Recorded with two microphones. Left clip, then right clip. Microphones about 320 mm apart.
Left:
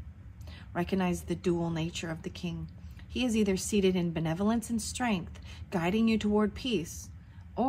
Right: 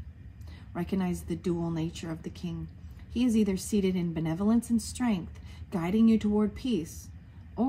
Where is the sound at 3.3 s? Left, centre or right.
Left.